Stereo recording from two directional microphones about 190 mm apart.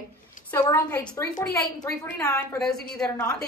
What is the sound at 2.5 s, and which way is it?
Speech, 5° left (ahead or behind).